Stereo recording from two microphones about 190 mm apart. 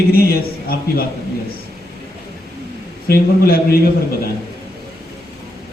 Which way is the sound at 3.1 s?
55° left (ahead or behind).